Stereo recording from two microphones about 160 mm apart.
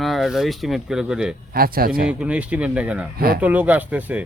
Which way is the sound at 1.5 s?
70° right (ahead or behind).